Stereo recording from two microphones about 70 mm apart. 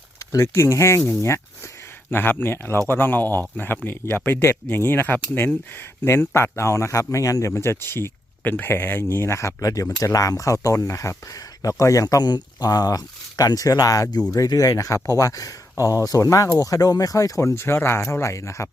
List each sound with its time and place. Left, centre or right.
0.3 s speech: left
2.0 s speech: left